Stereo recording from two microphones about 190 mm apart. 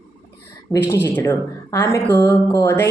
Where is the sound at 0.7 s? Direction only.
10° left (ahead or behind).